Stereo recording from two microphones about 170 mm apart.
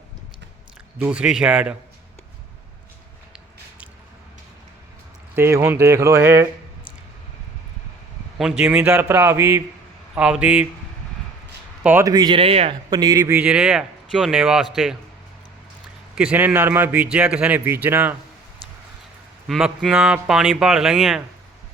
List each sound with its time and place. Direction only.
0.9 s speech: 10° right (ahead or behind)
5.3 s speech: 15° right (ahead or behind)
8.4 s speech: 5° right (ahead or behind)
11.8 s speech: 10° right (ahead or behind)
12.1 s speech: 25° right (ahead or behind)
12.9 s speech: 20° right (ahead or behind); by 14.9 s 5° right (ahead or behind)
16.1 s speech: 5° right (ahead or behind)
19.5 s speech: centre (ahead or behind)